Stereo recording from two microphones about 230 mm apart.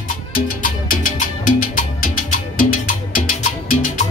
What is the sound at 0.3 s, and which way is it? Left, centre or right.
Salsa music, left.